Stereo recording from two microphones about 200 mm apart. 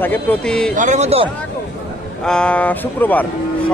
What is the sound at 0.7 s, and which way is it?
Speech, 35° right (ahead or behind).